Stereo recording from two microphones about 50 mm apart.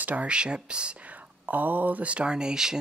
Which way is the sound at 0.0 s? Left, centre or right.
Right.